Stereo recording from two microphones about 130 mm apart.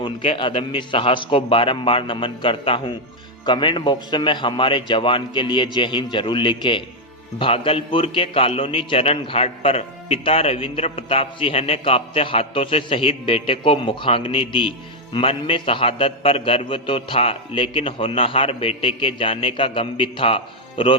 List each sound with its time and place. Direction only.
0.0 s a man's voice: 40° left (ahead or behind)